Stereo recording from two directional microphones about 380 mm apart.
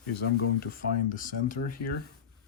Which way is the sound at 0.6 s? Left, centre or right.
Left.